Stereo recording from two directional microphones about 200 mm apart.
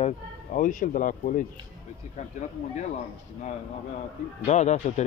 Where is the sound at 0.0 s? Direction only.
40° left (ahead or behind).